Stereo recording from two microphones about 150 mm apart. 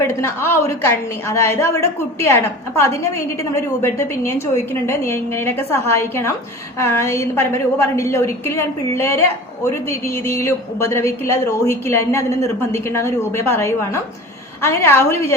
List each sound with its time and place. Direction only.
0.0 s a woman's voice: 15° left (ahead or behind)